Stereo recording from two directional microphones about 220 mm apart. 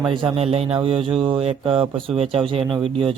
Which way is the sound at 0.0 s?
20° right (ahead or behind).